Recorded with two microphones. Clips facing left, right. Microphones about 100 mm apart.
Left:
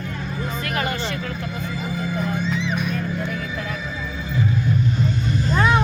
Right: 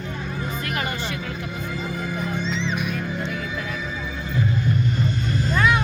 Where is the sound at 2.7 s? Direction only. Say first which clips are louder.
Left 2 dB; 15° right (ahead or behind).